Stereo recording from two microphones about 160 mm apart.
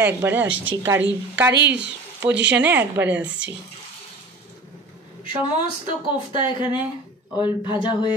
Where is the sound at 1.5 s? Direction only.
90° right.